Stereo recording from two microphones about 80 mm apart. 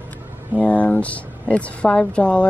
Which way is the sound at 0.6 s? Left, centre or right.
Centre.